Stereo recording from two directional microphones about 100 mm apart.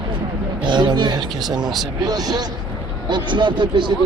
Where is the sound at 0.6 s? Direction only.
50° right (ahead or behind).